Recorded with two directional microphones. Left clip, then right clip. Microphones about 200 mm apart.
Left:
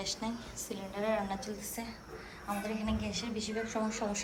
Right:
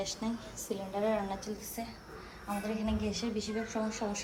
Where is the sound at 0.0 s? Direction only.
15° right (ahead or behind).